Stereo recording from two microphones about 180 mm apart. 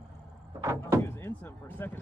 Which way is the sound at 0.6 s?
15° right (ahead or behind).